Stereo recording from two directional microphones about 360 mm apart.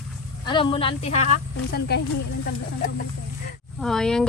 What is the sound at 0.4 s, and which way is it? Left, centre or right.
Speech, centre.